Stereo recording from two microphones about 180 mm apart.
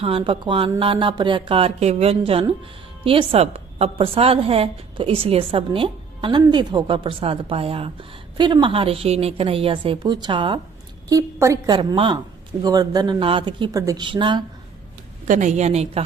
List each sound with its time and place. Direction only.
0.0 s a woman's voice: 30° right (ahead or behind)
15.3 s a woman's voice: 40° right (ahead or behind)